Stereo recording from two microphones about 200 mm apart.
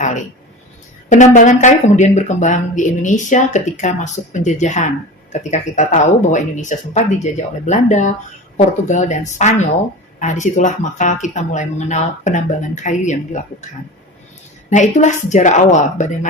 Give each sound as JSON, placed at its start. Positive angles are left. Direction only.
{"t": 1.1, "sound": "speech", "side_deg": 35}
{"t": 14.7, "sound": "speech", "side_deg": 35}